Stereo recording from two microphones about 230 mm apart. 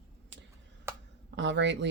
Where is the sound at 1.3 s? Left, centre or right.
Right.